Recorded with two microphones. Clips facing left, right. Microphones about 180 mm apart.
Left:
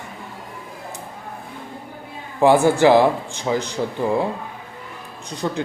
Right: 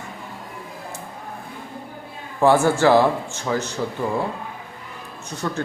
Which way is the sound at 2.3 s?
15° left (ahead or behind).